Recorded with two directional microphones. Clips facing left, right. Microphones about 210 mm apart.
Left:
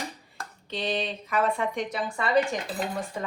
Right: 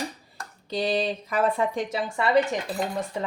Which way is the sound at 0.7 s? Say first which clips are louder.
Right 5 dB; 35° right (ahead or behind).